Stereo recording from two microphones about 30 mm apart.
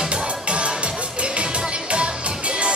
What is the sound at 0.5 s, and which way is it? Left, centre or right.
Music, right.